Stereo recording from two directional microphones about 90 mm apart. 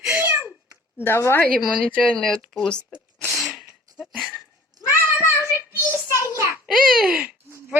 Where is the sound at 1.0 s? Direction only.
25° left (ahead or behind).